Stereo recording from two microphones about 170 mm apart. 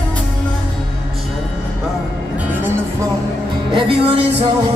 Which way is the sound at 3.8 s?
35° right (ahead or behind).